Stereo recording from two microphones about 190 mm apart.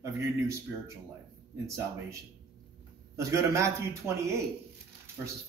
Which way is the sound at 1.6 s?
15° right (ahead or behind).